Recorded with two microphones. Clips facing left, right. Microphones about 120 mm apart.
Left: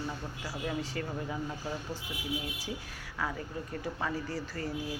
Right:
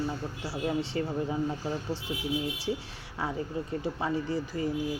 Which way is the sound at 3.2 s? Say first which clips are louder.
Right 4 dB; 30° right (ahead or behind).